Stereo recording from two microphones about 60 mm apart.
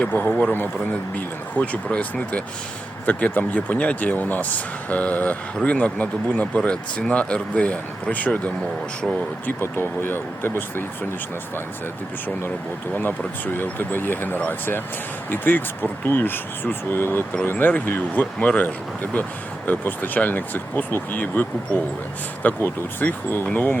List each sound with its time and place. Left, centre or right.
0.0 s speech: left
1.5 s speech: left
9.5 s speech: left
12.9 s speech: left
18.3 s speech: left
22.4 s speech: left